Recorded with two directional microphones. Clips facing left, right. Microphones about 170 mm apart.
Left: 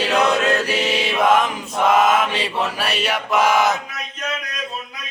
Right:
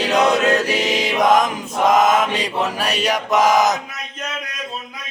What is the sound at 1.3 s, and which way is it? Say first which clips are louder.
Mantra: right 2 dB; 40° right (ahead or behind).